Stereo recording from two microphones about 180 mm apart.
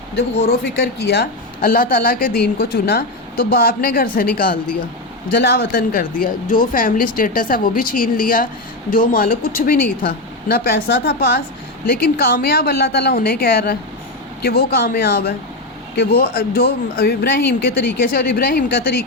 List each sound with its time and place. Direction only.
0.6 s a woman's voice: 65° left (ahead or behind)
5.3 s a woman's voice: 60° left (ahead or behind)